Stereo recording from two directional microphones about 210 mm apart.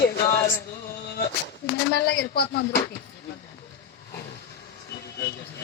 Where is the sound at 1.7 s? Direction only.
50° left (ahead or behind).